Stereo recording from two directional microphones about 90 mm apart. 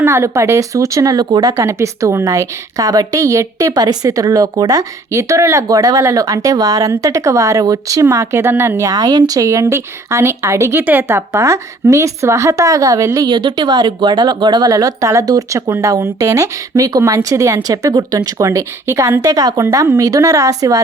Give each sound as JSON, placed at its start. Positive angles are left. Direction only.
{"t": 0.0, "sound": "a woman's voice", "side_deg": -30}
{"t": 1.5, "sound": "a woman's voice", "side_deg": -35}
{"t": 8.9, "sound": "a woman's voice", "side_deg": -45}
{"t": 13.1, "sound": "a woman's voice", "side_deg": -50}